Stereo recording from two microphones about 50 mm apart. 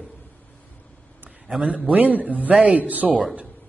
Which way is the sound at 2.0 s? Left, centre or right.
Right.